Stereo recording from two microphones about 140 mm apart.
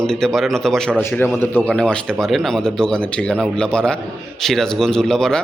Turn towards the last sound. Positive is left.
turn(degrees=5)  # may be behind; listen again after turning